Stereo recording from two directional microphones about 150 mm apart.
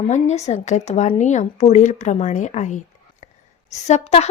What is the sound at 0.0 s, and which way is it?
A woman's voice, 50° left (ahead or behind).